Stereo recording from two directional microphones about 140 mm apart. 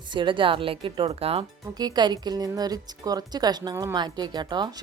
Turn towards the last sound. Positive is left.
turn(degrees=-30)  # may be behind; listen again after turning